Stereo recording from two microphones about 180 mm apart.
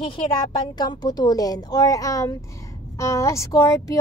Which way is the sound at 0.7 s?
20° left (ahead or behind).